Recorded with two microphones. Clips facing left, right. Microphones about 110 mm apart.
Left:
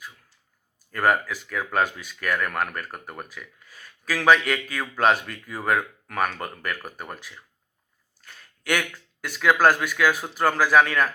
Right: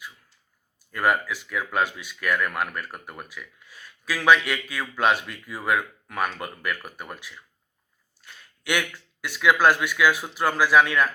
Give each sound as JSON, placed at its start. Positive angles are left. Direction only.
{"t": 0.9, "sound": "speech", "side_deg": 45}